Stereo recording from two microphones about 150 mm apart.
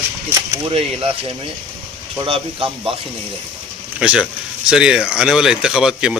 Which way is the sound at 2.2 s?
35° right (ahead or behind).